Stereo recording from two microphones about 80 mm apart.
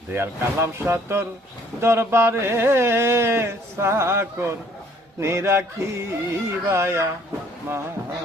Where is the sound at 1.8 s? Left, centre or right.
Right.